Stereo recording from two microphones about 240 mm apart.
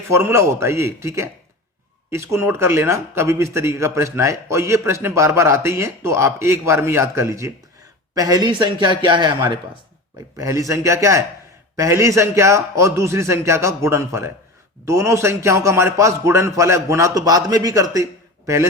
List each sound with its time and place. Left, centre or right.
0.1 s a man's voice: centre